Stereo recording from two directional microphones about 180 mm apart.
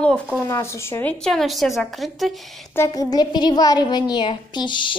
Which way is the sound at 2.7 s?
15° left (ahead or behind).